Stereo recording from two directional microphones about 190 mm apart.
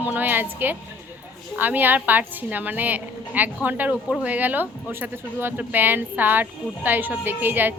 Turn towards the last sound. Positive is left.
turn(degrees=-10)  # may be behind; listen again after turning